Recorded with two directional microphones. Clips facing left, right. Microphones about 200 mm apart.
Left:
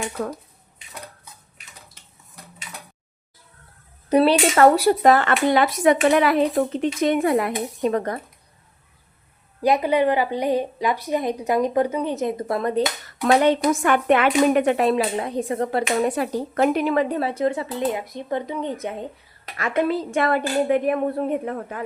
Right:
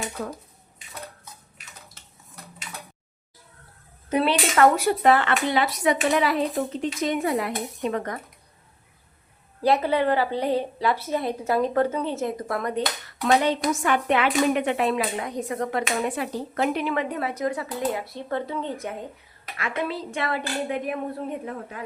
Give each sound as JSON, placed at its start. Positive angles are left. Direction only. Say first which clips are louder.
{"t": 4.1, "sound": "speech", "louder": "left 6 dB", "side_deg": 35}
{"t": 9.6, "sound": "a woman's voice", "louder": "left 2 dB", "side_deg": 15}
{"t": 13.4, "sound": "speech", "louder": "left 5 dB", "side_deg": 55}
{"t": 19.5, "sound": "speech", "louder": "left 7 dB", "side_deg": 45}